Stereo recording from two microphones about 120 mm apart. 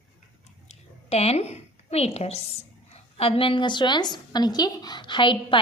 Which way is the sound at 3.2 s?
50° left (ahead or behind).